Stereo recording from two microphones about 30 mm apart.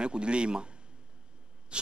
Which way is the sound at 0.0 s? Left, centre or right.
Right.